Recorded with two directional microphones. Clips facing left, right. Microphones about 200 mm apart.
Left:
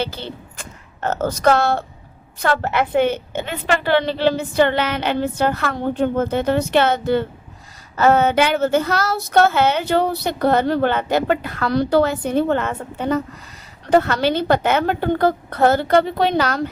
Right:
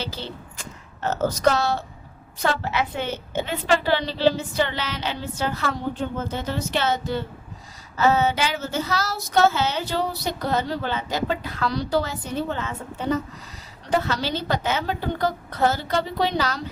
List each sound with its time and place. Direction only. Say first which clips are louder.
0.0 s speech: left 6 dB; 60° left (ahead or behind)